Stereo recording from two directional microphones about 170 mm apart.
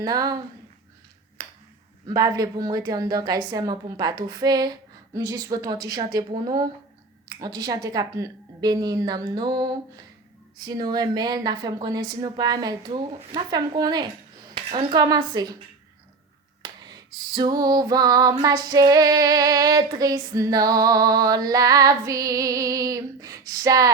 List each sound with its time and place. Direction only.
0.0 s female singing: 20° right (ahead or behind)
2.0 s female singing: 20° right (ahead or behind)
16.8 s female singing: 25° right (ahead or behind)